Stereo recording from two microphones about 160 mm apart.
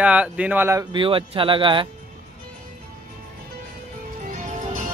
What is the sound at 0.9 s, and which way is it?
Speech, 35° right (ahead or behind).